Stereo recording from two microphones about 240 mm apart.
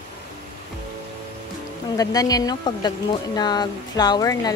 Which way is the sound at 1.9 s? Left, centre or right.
Centre.